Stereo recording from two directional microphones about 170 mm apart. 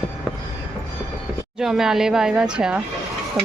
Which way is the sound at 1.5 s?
5° right (ahead or behind).